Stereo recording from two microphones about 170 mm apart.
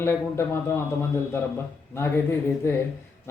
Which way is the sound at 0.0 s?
15° left (ahead or behind).